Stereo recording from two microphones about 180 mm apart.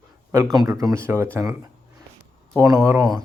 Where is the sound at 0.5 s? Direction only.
20° right (ahead or behind).